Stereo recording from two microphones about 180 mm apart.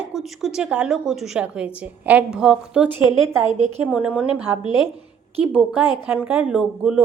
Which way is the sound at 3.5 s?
40° right (ahead or behind).